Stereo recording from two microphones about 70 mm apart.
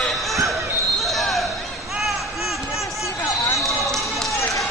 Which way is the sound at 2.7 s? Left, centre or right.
Left.